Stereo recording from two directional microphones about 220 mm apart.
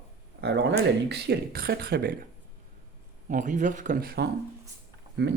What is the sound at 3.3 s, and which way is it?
Speech, 35° right (ahead or behind).